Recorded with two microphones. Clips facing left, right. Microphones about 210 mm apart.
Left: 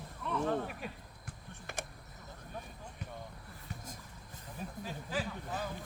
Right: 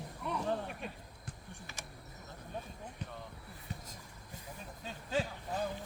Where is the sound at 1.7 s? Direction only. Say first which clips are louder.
Left 11 dB; 55° left (ahead or behind).